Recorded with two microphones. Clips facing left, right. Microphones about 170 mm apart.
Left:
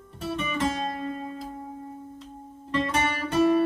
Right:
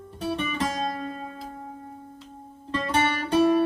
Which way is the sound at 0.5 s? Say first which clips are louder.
Left 1 dB; 35° right (ahead or behind).